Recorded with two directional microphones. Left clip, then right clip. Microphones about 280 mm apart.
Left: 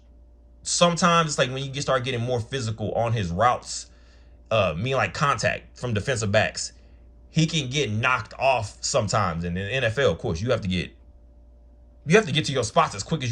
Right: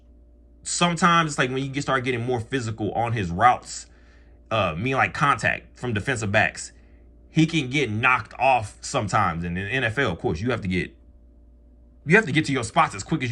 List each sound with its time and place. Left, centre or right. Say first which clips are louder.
0.6 s speech: left 1 dB; centre
12.2 s speech: right 1 dB; centre